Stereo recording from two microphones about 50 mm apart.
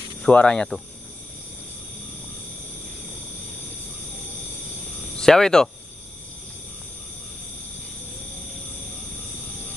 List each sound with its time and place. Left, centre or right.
0.3 s cricket: left
5.1 s speech: centre